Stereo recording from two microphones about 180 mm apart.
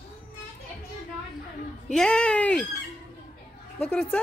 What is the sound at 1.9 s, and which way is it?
Speech, 5° left (ahead or behind).